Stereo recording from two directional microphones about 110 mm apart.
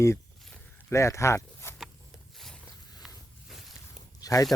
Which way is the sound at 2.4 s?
5° left (ahead or behind).